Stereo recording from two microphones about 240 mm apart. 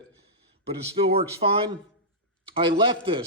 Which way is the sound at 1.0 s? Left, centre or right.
Right.